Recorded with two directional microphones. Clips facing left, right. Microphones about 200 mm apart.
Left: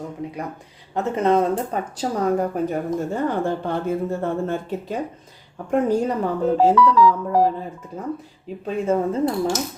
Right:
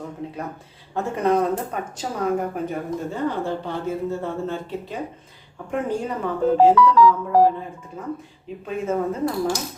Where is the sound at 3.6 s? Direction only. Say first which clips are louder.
Left 3 dB; 50° left (ahead or behind).